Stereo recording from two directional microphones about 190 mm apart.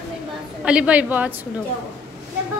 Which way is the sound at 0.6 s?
5° right (ahead or behind).